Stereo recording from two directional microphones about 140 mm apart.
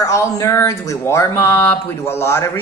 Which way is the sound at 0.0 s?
20° left (ahead or behind).